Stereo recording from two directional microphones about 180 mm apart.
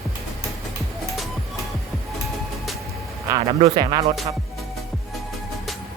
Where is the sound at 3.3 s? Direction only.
20° right (ahead or behind).